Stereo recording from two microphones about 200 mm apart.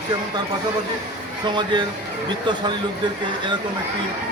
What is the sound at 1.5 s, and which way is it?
Speech, 20° right (ahead or behind).